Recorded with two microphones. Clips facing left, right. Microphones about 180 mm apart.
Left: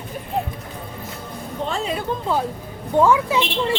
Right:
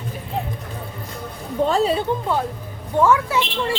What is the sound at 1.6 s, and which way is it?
Speech, 35° right (ahead or behind).